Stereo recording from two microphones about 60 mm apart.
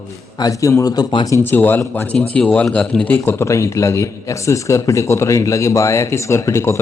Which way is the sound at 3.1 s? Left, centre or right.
Left.